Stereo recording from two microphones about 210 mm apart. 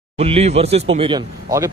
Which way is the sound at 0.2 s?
30° right (ahead or behind).